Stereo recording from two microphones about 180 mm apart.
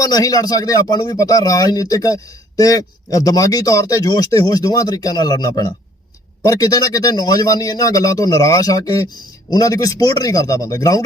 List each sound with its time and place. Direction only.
0.0 s speech: 20° left (ahead or behind)